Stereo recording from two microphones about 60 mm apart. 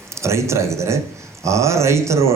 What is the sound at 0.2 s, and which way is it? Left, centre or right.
Speech, right.